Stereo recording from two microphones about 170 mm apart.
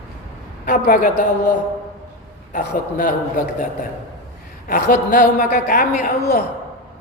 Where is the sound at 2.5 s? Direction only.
50° left (ahead or behind).